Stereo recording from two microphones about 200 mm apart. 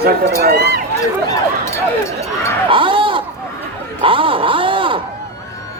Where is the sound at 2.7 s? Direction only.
25° right (ahead or behind).